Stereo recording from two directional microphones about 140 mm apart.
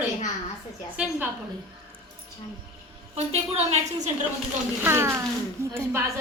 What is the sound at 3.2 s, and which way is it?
Speech, 50° right (ahead or behind).